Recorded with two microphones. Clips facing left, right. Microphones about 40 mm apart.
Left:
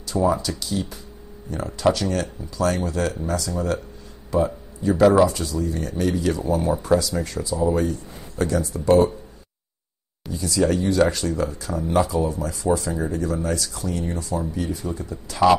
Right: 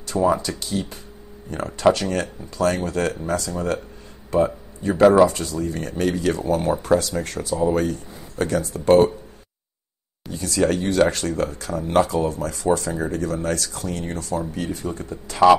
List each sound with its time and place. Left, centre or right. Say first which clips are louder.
0.0 s speech: right 1 dB; right
10.3 s speech: even; right